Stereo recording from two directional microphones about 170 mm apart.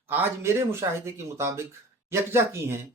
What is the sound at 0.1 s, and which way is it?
Speech, 15° right (ahead or behind).